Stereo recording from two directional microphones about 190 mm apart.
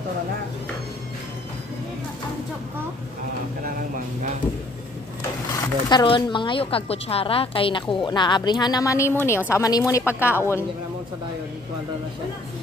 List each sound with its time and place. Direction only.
5.6 s a woman's voice: 20° left (ahead or behind)